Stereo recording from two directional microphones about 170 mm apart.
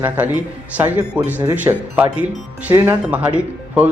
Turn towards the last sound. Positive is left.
turn(degrees=-10)  # may be behind; listen again after turning